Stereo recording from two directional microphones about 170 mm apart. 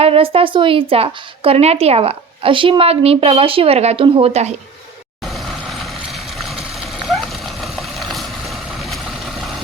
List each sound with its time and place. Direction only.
0.0 s a woman's voice: 35° right (ahead or behind)
5.2 s vehicle: centre (ahead or behind)
6.1 s a sound: centre (ahead or behind)